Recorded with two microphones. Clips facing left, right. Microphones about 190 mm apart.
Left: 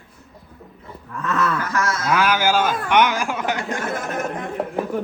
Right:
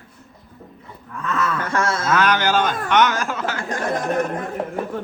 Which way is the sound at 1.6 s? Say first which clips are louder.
Right 2 dB; 30° right (ahead or behind).